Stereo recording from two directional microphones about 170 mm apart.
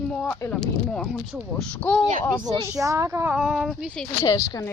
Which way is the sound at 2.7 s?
20° right (ahead or behind).